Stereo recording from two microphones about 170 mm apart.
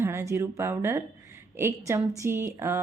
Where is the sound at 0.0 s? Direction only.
15° right (ahead or behind).